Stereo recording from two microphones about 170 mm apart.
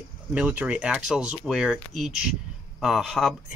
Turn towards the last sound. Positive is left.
turn(degrees=0)  # may be behind; listen again after turning